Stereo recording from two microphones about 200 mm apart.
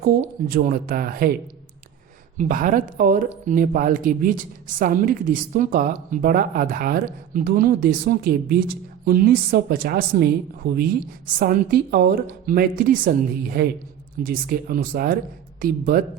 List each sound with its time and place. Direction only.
0.0 s speech: 45° right (ahead or behind)
2.4 s speech: 40° right (ahead or behind)